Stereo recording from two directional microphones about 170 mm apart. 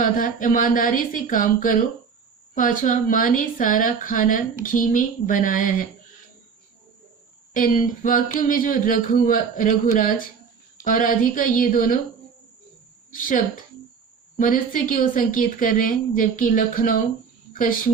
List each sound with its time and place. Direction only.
0.0 s speech: 50° left (ahead or behind)
7.5 s speech: 50° left (ahead or behind)
13.1 s a woman's voice: 50° left (ahead or behind)